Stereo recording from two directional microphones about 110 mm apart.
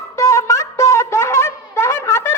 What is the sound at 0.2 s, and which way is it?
Music, 25° left (ahead or behind).